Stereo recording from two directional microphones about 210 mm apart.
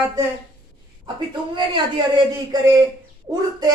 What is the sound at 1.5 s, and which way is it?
A man's voice, 20° right (ahead or behind).